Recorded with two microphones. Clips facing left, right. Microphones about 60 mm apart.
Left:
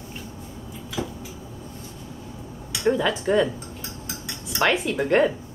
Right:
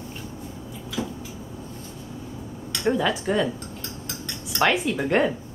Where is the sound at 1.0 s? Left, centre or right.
Left.